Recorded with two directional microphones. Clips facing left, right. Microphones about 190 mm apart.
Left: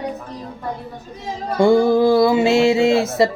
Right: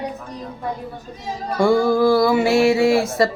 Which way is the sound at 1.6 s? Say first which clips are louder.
Left 2 dB; 20° left (ahead or behind).